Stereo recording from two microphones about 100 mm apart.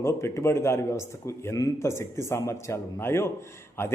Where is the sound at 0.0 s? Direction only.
25° left (ahead or behind).